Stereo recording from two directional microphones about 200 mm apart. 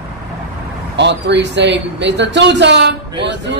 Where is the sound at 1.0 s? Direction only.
60° right (ahead or behind).